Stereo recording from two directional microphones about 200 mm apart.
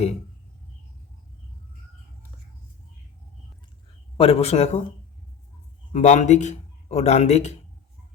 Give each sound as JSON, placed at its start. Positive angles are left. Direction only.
{"t": 4.2, "sound": "speech", "side_deg": 30}
{"t": 5.9, "sound": "speech", "side_deg": 35}